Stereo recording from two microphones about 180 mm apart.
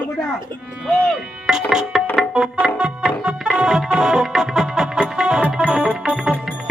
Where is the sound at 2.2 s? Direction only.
Centre (ahead or behind).